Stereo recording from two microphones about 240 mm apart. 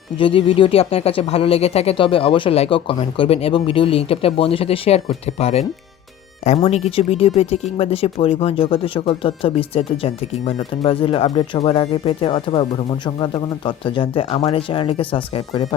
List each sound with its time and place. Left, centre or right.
0.2 s speech: left